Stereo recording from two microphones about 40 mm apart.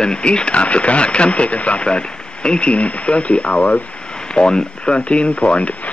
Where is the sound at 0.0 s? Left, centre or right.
Left.